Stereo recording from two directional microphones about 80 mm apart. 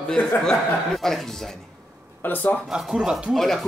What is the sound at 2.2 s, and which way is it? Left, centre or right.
Speech, left.